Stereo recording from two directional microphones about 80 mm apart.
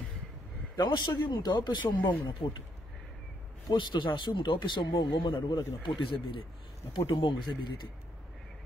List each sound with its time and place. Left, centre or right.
0.7 s speech: left
3.6 s speech: left